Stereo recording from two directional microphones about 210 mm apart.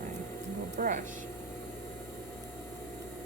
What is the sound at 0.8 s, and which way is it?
Speech, 40° right (ahead or behind).